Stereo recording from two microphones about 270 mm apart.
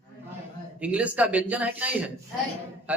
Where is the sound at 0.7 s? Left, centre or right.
Centre.